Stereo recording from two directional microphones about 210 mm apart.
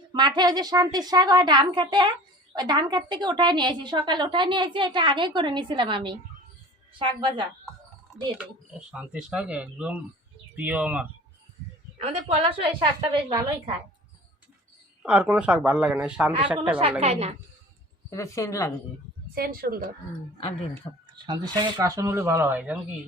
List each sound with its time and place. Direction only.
0.1 s a woman's voice: 20° right (ahead or behind)
8.9 s speech: 5° right (ahead or behind)
11.9 s a woman's voice: 30° right (ahead or behind)
15.0 s speech: 5° right (ahead or behind)
17.0 s a woman's voice: 30° right (ahead or behind)
18.1 s speech: 15° left (ahead or behind)
19.3 s speech: 45° right (ahead or behind)
20.9 s speech: 25° left (ahead or behind)
21.2 s speech: 20° right (ahead or behind)